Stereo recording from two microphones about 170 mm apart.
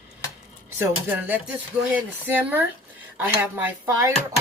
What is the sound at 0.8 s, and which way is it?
Speech, 10° right (ahead or behind).